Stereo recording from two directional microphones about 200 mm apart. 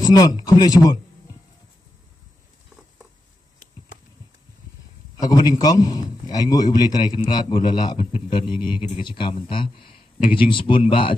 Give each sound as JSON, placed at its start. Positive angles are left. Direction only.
{"t": 0.0, "sound": "a man's voice", "side_deg": 20}
{"t": 5.2, "sound": "a man's voice", "side_deg": 20}